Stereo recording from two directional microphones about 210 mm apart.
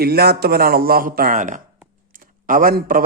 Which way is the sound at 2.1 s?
40° right (ahead or behind).